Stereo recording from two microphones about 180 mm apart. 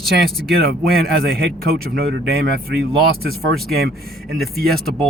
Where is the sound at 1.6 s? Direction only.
60° right (ahead or behind).